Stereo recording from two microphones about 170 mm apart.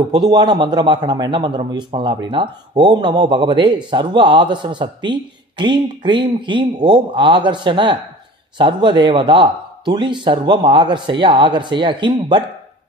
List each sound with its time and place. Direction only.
0.1 s a man's voice: 25° right (ahead or behind)